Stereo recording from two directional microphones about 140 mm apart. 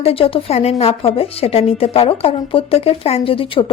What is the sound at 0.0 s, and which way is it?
Speech, 40° left (ahead or behind).